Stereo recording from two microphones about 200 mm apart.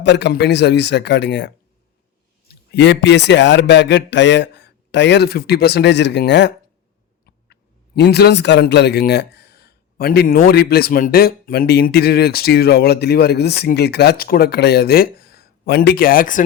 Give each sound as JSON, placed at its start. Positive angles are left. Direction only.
{"t": 0.0, "sound": "a man's voice", "side_deg": 60}